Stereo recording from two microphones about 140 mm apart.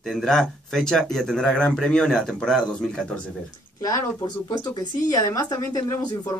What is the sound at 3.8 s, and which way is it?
A woman's voice, 25° left (ahead or behind).